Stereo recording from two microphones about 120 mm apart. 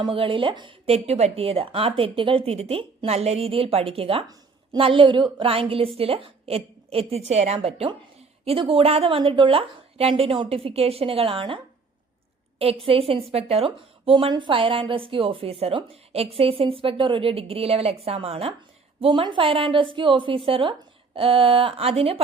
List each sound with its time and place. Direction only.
0.1 s a woman's voice: 45° right (ahead or behind)